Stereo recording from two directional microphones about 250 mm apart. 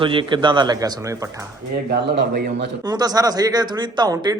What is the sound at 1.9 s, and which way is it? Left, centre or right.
Speech, right.